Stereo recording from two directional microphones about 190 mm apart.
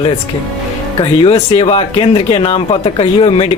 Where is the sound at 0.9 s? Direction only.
30° left (ahead or behind).